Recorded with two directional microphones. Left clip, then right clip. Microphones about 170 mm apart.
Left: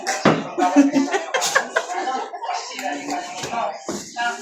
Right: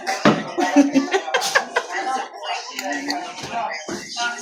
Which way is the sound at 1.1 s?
30° right (ahead or behind).